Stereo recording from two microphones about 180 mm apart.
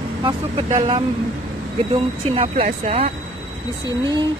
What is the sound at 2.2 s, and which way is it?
Speech, 30° right (ahead or behind).